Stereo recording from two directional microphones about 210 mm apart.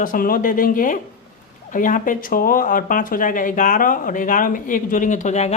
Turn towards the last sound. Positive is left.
turn(degrees=35)  # may be behind; listen again after turning